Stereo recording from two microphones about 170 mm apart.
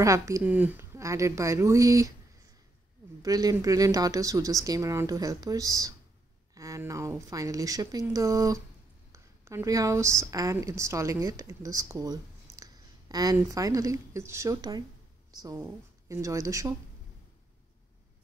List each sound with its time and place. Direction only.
0.0 s speech: 20° right (ahead or behind)
3.2 s a woman's voice: 20° right (ahead or behind)